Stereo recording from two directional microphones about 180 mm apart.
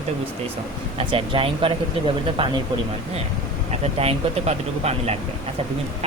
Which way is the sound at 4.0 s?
35° right (ahead or behind).